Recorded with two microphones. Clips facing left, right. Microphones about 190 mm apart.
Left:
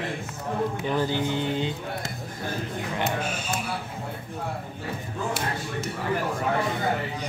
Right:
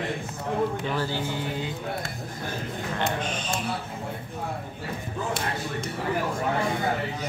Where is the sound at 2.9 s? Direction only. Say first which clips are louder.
Even; 10° left (ahead or behind).